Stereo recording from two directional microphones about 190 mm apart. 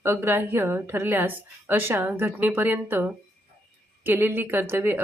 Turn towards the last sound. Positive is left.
turn(degrees=-10)  # may be behind; listen again after turning